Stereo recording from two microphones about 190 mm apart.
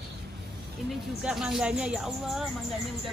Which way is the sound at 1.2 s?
5° right (ahead or behind).